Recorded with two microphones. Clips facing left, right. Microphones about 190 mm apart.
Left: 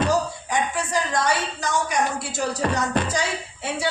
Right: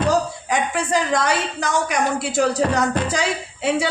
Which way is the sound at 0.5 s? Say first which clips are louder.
Right 4 dB; 90° right.